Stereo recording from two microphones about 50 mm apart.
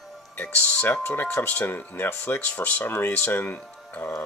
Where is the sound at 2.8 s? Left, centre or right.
Left.